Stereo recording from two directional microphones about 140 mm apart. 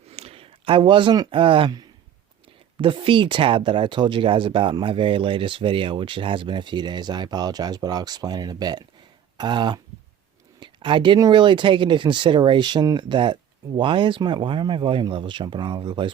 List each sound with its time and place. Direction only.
0.1 s speech: 45° right (ahead or behind)